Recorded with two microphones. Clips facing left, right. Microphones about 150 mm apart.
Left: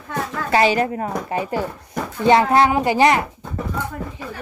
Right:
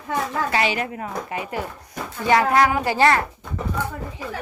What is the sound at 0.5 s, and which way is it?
Speech, 35° left (ahead or behind).